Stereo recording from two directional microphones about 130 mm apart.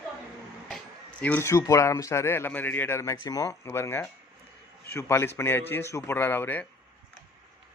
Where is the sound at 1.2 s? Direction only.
15° left (ahead or behind).